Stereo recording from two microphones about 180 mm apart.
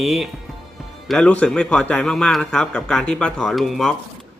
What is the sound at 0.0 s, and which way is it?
A man's voice, centre (ahead or behind).